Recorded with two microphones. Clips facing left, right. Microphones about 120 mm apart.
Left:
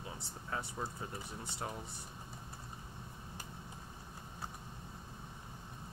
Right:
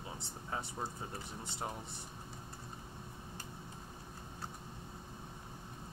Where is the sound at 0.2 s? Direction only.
20° right (ahead or behind).